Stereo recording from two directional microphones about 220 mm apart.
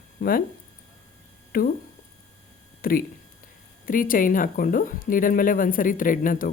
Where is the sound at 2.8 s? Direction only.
40° left (ahead or behind).